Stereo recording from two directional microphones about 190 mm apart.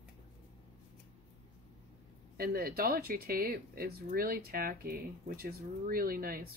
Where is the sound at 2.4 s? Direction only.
50° right (ahead or behind).